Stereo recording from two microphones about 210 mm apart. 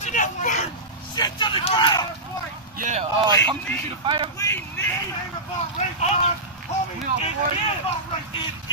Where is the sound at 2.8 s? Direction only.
35° right (ahead or behind).